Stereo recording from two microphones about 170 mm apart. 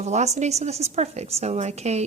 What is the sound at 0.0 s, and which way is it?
Speech, 40° right (ahead or behind).